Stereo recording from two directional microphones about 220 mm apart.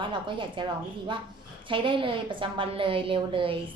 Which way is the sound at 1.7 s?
25° right (ahead or behind).